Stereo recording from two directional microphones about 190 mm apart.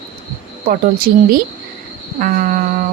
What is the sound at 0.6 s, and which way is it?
A woman's voice, 50° right (ahead or behind).